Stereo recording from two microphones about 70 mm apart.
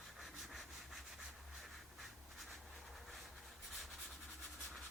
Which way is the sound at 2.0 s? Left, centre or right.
Centre.